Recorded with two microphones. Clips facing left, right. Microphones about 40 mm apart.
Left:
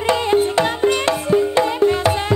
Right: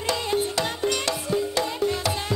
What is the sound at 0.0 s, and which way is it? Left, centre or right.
Music, left.